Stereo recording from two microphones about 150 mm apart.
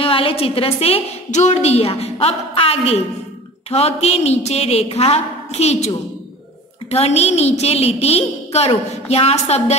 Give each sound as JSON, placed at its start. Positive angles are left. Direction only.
{"t": 0.0, "sound": "a woman's voice", "side_deg": 35}
{"t": 6.9, "sound": "a woman's voice", "side_deg": 45}